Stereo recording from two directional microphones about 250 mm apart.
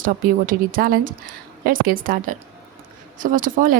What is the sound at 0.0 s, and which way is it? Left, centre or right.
A woman's voice, right.